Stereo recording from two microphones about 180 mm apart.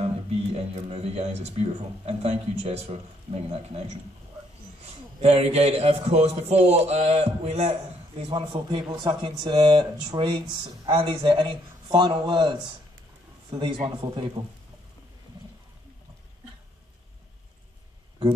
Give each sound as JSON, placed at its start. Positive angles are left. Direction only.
{"t": 0.0, "sound": "speech", "side_deg": -35}
{"t": 5.2, "sound": "a man's voice", "side_deg": -35}